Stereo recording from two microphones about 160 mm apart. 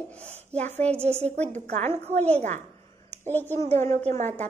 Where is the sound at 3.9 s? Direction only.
45° right (ahead or behind).